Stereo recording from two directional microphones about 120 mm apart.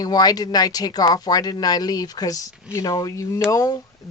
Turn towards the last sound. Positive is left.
turn(degrees=30)  # may be behind; listen again after turning